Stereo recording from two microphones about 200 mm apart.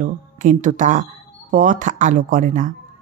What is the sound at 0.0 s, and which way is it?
Speech, 40° right (ahead or behind).